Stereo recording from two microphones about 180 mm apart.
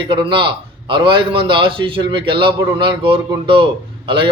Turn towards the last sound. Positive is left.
turn(degrees=-30)  # may be behind; listen again after turning